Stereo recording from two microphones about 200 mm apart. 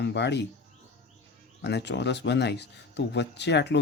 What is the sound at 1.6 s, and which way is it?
Speech, 60° left (ahead or behind).